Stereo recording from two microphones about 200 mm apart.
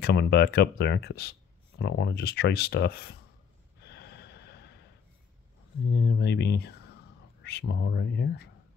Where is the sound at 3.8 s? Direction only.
55° left (ahead or behind).